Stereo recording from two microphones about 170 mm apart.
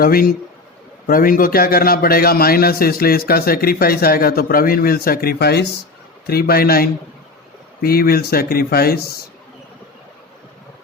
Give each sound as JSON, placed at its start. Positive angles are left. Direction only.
{"t": 0.0, "sound": "a man's voice", "side_deg": 60}